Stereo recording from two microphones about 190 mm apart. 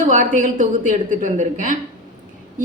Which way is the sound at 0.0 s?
45° right (ahead or behind).